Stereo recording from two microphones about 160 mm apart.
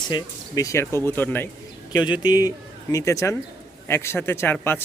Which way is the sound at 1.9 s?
25° left (ahead or behind).